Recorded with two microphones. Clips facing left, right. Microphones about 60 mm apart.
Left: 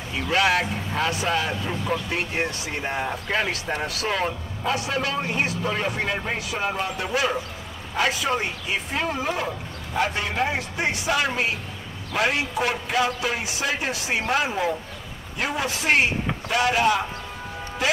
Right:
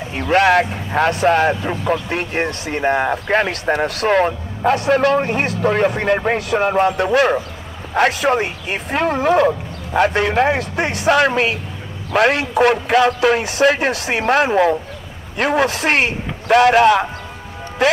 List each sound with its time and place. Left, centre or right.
0.1 s a man's voice: right